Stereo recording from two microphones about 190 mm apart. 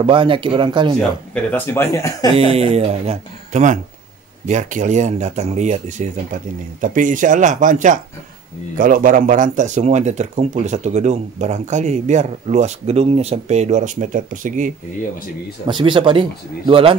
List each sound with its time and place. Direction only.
0.0 s speech: 25° right (ahead or behind)
1.0 s speech: 5° left (ahead or behind)
2.3 s speech: 30° right (ahead or behind)
15.6 s speech: 25° right (ahead or behind)